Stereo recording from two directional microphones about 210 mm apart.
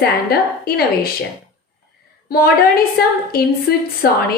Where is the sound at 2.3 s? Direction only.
45° left (ahead or behind).